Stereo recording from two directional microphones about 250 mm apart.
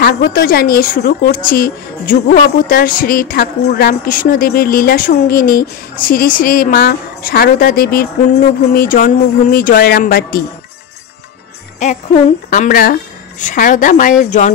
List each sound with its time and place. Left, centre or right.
0.0 s a woman's voice: left
11.8 s jingle bell: left
12.4 s a woman's voice: left